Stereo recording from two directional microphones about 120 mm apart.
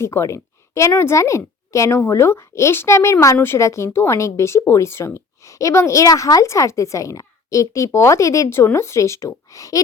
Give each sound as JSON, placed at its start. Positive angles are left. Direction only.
{"t": 0.0, "sound": "a woman's voice", "side_deg": 25}